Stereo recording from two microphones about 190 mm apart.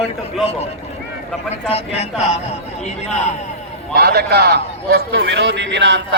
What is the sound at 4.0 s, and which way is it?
A man's voice, 55° right (ahead or behind).